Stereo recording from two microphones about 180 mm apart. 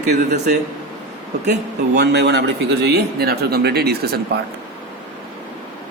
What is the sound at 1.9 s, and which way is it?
A man's voice, 70° right (ahead or behind).